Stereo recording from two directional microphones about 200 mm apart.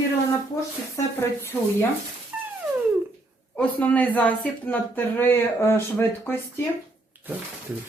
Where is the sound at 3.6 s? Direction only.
5° left (ahead or behind).